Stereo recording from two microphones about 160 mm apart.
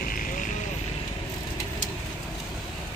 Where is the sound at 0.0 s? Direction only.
60° left (ahead or behind).